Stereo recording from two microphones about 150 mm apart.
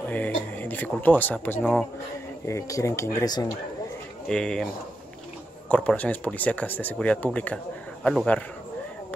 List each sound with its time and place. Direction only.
0.1 s speech: 10° left (ahead or behind)
4.3 s speech: 5° left (ahead or behind)
5.7 s speech: 10° left (ahead or behind)